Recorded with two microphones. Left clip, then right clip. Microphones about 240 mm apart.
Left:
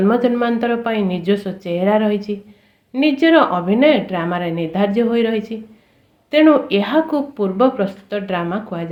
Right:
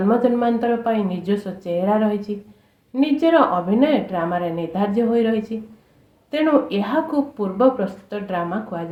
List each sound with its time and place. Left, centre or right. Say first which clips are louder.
0.1 s speech: left 1 dB; left